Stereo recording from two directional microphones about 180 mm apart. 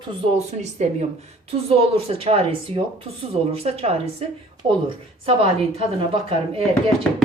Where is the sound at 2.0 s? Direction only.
30° right (ahead or behind).